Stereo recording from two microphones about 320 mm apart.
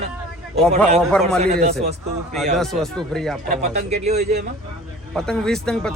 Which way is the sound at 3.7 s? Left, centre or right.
Right.